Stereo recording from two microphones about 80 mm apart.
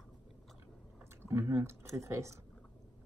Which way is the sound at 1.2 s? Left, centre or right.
Right.